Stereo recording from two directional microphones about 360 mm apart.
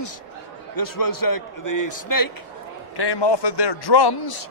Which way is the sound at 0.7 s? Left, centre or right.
Left.